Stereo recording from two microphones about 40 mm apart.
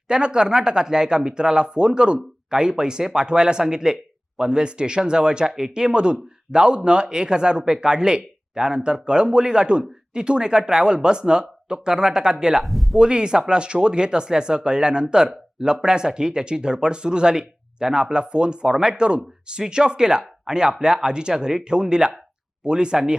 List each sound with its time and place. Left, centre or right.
0.1 s speech: right
12.6 s a sound: centre
13.0 s speech: right